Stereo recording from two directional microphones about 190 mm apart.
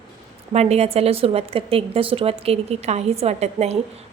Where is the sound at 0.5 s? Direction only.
35° right (ahead or behind).